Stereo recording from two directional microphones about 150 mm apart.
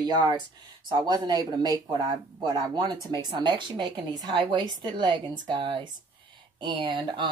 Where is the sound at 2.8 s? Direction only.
30° right (ahead or behind).